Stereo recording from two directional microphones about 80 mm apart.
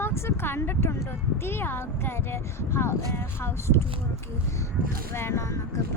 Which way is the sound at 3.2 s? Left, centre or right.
Left.